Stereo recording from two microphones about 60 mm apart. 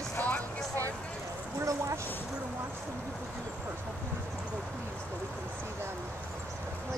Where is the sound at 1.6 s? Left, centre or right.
Right.